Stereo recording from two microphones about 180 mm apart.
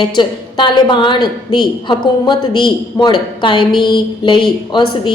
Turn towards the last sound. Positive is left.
turn(degrees=25)  # may be behind; listen again after turning